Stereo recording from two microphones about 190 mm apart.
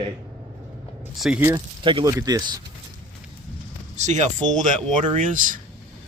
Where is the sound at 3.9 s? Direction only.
40° right (ahead or behind).